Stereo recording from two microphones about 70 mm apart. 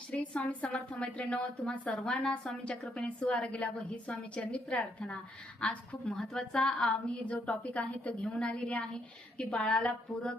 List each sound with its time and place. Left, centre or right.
0.1 s a woman's voice: left